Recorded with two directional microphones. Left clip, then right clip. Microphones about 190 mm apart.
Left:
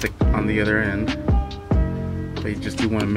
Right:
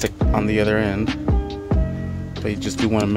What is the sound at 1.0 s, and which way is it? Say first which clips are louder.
Music: right 1 dB; centre (ahead or behind).